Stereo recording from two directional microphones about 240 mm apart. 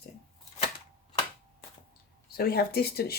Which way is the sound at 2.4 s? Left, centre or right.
Left.